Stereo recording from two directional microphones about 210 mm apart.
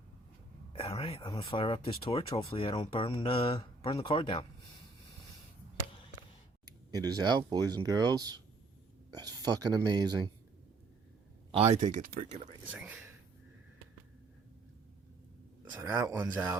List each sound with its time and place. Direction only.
0.7 s speech: 25° left (ahead or behind)
6.9 s speech: 20° right (ahead or behind)
11.5 s speech: 30° right (ahead or behind)
12.7 s speech: 5° right (ahead or behind)
15.7 s speech: 10° right (ahead or behind)